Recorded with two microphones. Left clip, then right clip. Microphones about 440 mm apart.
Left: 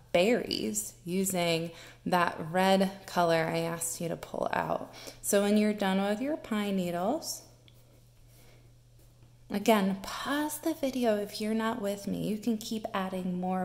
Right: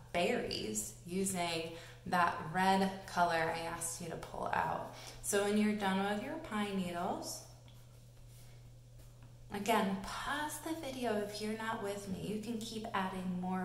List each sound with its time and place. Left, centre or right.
0.1 s speech: centre
9.5 s speech: centre